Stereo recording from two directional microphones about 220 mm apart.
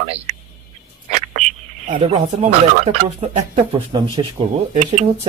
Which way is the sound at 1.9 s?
30° right (ahead or behind).